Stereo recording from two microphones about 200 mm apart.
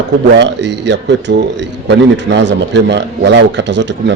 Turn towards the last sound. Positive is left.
turn(degrees=-65)  # may be behind; listen again after turning